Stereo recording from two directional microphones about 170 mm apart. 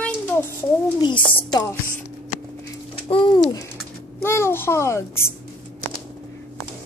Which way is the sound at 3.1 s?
25° left (ahead or behind).